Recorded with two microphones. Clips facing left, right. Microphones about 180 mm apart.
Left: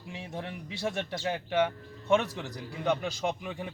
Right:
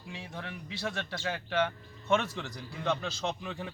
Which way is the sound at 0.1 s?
20° left (ahead or behind).